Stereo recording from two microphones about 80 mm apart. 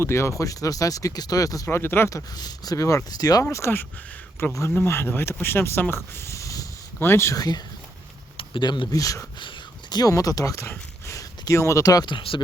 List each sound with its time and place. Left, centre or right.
0.0 s speech: left
2.1 s speech: left
3.5 s speech: left
5.9 s a sound: left
7.0 s speech: left
7.3 s speech: left
8.4 s speech: left
8.9 s speech: left
12.0 s speech: left